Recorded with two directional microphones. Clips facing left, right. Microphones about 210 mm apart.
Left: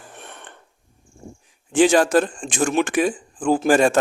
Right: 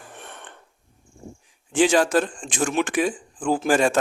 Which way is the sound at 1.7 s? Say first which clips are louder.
Left 3 dB; 45° left (ahead or behind).